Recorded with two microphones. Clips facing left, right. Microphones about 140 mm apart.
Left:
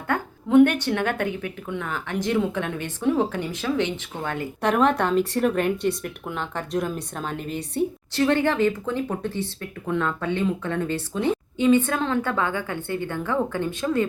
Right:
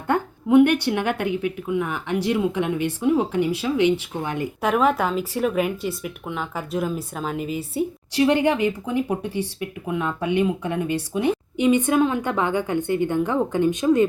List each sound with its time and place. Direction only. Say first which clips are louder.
0.1 s speech: right 2 dB; 10° right (ahead or behind)
4.6 s speech: even; 5° right (ahead or behind)